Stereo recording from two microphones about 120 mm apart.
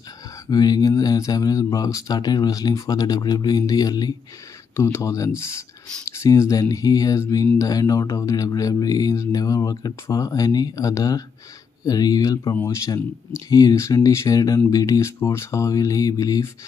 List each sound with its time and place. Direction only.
0.5 s speech: 35° left (ahead or behind)
4.7 s speech: 20° left (ahead or behind)